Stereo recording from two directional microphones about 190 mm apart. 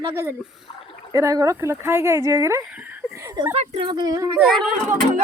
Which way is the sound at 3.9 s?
20° right (ahead or behind).